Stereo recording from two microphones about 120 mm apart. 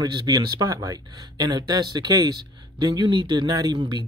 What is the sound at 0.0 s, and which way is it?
Speech, 35° right (ahead or behind).